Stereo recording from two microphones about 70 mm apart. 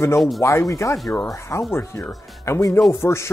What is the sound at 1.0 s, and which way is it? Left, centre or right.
Speech, centre.